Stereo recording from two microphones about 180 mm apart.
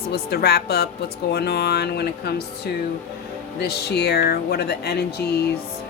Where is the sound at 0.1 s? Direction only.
60° left (ahead or behind).